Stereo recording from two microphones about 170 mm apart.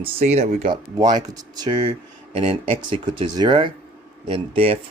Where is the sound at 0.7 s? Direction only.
25° right (ahead or behind).